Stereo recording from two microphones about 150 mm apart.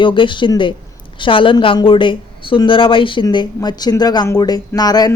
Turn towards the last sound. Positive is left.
turn(degrees=25)  # may be behind; listen again after turning